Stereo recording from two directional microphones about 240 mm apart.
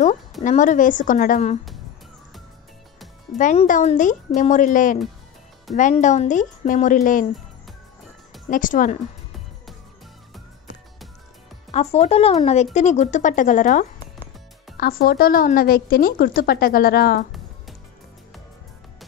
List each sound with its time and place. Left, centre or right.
0.4 s a woman's voice: left
3.3 s a woman's voice: left
8.5 s a woman's voice: left
11.7 s a woman's voice: left